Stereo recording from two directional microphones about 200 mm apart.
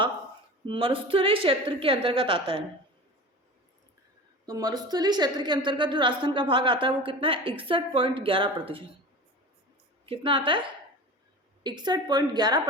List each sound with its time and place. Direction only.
0.6 s a woman's voice: 25° right (ahead or behind)
4.4 s a woman's voice: 20° right (ahead or behind)
10.1 s a woman's voice: 25° right (ahead or behind)
11.6 s a woman's voice: 20° right (ahead or behind)